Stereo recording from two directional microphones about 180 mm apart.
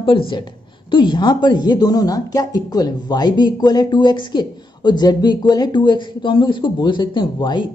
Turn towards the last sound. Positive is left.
turn(degrees=25)  # may be behind; listen again after turning